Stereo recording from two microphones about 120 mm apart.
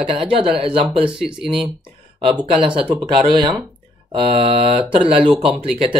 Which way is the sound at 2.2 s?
45° right (ahead or behind).